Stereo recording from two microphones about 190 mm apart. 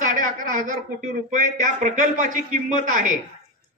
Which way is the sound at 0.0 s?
45° right (ahead or behind).